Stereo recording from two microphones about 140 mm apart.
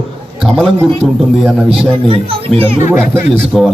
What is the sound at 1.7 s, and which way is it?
Speech, 40° right (ahead or behind).